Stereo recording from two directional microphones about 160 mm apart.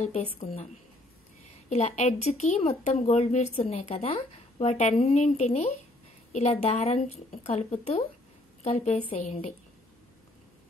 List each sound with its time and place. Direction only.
0.0 s a woman's voice: 40° left (ahead or behind)
1.7 s a woman's voice: 45° left (ahead or behind)